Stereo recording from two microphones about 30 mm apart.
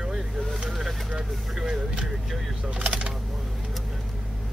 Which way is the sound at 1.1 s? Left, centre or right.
Centre.